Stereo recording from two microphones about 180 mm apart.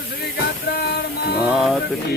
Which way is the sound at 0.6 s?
60° left (ahead or behind).